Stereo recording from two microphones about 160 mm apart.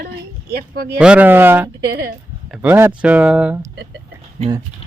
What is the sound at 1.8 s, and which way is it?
Speech, 75° right (ahead or behind).